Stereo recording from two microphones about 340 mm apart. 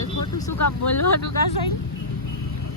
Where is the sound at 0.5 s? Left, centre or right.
Left.